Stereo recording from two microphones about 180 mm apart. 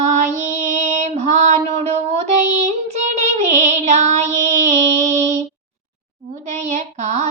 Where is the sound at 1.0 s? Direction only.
40° right (ahead or behind).